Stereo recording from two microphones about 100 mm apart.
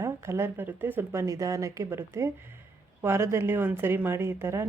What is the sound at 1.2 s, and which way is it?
A woman's voice, 35° right (ahead or behind).